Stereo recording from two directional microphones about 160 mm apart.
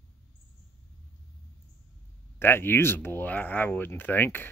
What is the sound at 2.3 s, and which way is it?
Speech, 15° left (ahead or behind).